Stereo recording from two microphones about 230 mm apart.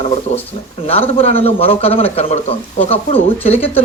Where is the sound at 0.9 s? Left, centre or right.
Left.